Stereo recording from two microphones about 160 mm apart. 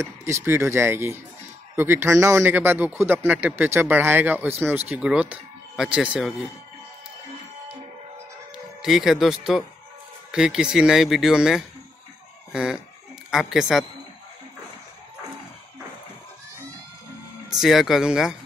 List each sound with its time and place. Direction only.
0.0 s speech: 15° right (ahead or behind)
8.8 s speech: centre (ahead or behind)
17.6 s speech: centre (ahead or behind)